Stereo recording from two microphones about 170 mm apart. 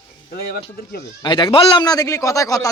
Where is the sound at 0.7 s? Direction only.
65° left (ahead or behind).